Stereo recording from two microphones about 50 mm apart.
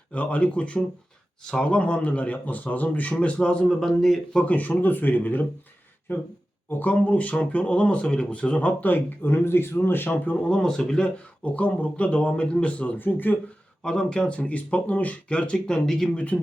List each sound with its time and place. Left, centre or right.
0.1 s speech: left
3.7 s speech: centre
4.4 s speech: left
6.7 s speech: left
9.3 s a man's voice: left
10.6 s speech: centre
11.4 s speech: left
13.8 s speech: centre
15.5 s speech: centre
16.1 s speech: left